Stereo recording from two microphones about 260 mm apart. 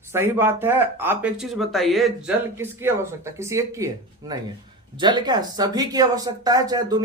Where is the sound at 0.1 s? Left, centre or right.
Centre.